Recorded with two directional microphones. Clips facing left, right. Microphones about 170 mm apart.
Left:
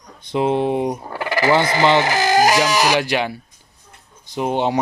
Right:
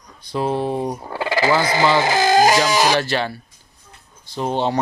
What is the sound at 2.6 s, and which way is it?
Speech, 20° right (ahead or behind).